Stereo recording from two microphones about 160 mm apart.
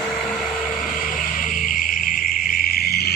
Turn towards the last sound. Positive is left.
turn(degrees=80)